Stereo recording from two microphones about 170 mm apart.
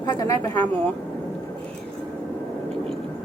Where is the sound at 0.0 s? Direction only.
20° left (ahead or behind).